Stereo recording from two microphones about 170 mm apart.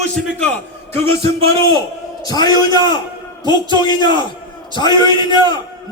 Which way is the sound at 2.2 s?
25° left (ahead or behind).